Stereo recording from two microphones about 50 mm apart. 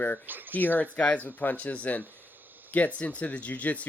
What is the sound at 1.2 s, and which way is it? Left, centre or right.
Speech, left.